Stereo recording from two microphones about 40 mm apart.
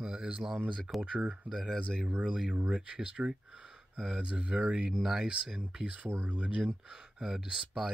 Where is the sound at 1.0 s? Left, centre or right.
Right.